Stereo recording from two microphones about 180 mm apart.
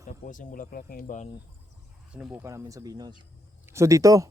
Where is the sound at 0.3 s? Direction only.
45° left (ahead or behind).